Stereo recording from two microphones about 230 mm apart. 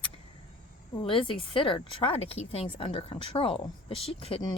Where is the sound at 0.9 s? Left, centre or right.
Left.